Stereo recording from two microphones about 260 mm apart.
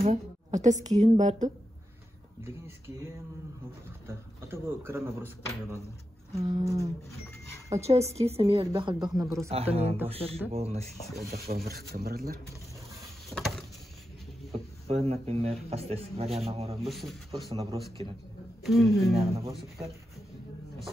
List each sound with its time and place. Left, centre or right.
0.0 s a woman's voice: right
4.1 s speech: centre
6.3 s speech: centre
7.8 s a woman's voice: right
9.5 s a woman's voice: right
11.2 s speech: right
13.3 s vehicle: centre
14.5 s a woman's voice: right
16.8 s speech: centre
17.3 s speech: centre
18.6 s speech: centre